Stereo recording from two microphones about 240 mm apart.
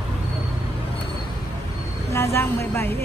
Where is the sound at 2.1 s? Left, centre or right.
Centre.